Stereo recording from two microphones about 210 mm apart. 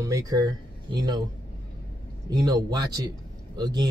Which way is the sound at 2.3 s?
20° right (ahead or behind).